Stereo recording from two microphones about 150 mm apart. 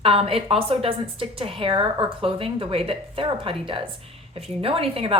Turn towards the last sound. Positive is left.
turn(degrees=-40)  # may be behind; listen again after turning